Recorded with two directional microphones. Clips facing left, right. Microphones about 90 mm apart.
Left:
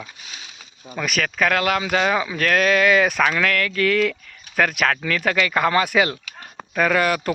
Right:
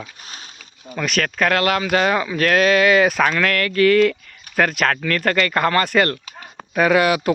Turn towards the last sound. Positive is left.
turn(degrees=-5)  # may be behind; listen again after turning